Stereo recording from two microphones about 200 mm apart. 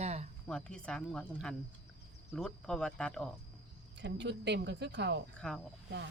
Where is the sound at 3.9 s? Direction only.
60° right (ahead or behind).